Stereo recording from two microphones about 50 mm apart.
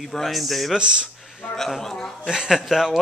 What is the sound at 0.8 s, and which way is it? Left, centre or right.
Speech, centre.